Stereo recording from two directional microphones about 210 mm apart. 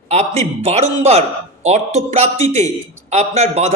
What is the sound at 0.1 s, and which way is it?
A man's voice, 30° right (ahead or behind).